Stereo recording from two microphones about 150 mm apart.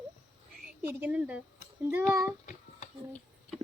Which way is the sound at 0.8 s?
10° right (ahead or behind).